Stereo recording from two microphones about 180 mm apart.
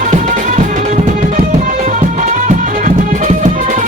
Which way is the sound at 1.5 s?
40° right (ahead or behind).